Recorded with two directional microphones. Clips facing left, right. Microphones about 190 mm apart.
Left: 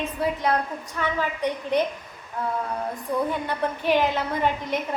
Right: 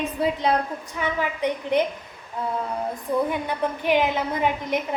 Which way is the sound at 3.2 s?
15° right (ahead or behind).